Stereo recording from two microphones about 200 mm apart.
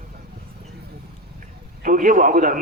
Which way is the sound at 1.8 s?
40° right (ahead or behind).